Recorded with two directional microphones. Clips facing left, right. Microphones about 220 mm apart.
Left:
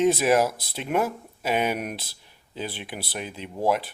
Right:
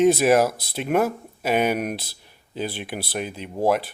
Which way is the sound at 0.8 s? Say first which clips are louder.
Right 4 dB; 50° right (ahead or behind).